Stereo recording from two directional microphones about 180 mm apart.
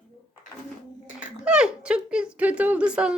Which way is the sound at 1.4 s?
5° right (ahead or behind).